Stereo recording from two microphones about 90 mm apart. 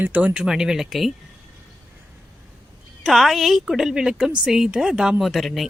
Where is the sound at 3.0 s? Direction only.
Centre (ahead or behind).